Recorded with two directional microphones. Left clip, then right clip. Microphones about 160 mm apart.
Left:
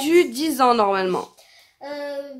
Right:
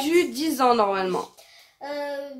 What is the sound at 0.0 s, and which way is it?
Speech, 40° left (ahead or behind).